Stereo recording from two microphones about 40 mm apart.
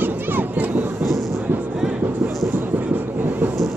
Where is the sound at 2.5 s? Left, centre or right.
Right.